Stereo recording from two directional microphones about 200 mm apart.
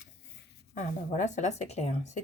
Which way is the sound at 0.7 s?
40° left (ahead or behind).